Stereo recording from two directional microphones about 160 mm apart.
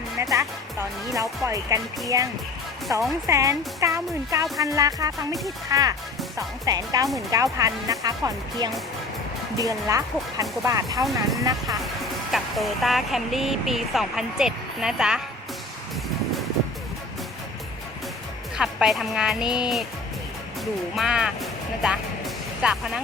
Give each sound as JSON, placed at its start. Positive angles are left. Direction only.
{"t": 0.2, "sound": "speech", "side_deg": -20}
{"t": 11.0, "sound": "speech", "side_deg": 0}
{"t": 18.5, "sound": "speech", "side_deg": -5}
{"t": 20.9, "sound": "speech", "side_deg": -5}
{"t": 22.6, "sound": "speech", "side_deg": -5}